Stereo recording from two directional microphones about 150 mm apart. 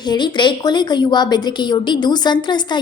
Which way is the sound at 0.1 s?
30° left (ahead or behind).